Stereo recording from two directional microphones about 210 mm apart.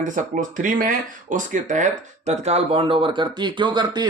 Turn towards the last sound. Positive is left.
turn(degrees=-20)  # may be behind; listen again after turning